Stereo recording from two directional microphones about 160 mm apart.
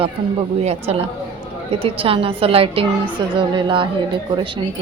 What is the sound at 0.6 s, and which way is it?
A woman's voice, 40° right (ahead or behind).